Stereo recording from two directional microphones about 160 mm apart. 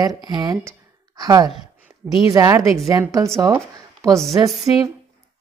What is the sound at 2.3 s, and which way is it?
A woman's voice, 20° right (ahead or behind).